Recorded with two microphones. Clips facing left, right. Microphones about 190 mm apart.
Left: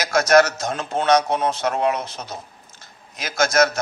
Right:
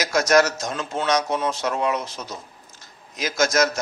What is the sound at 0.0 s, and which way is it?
Speech, 55° left (ahead or behind).